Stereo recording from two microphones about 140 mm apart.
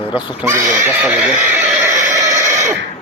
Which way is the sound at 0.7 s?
15° right (ahead or behind).